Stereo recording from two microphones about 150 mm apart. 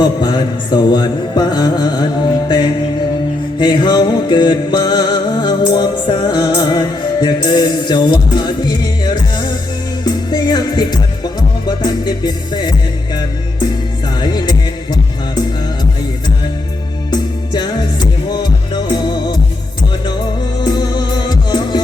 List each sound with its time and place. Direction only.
0.0 s music: 30° left (ahead or behind)
14.2 s music: 30° left (ahead or behind)
17.1 s music: 30° left (ahead or behind)
20.6 s music: 30° left (ahead or behind)